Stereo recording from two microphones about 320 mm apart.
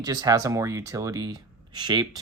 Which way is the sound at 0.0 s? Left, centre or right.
Centre.